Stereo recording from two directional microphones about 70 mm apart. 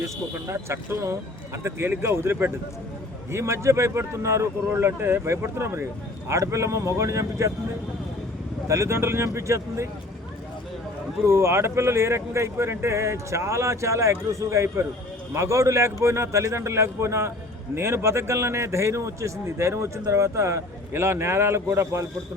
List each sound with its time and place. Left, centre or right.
0.0 s a man's voice: right
4.7 s a man's voice: right
8.6 s speech: right
11.3 s a man's voice: right